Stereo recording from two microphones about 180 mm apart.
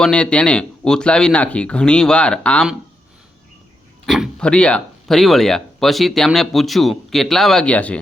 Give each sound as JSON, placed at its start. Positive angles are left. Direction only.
{"t": 0.0, "sound": "speech", "side_deg": 5}
{"t": 4.0, "sound": "speech", "side_deg": 0}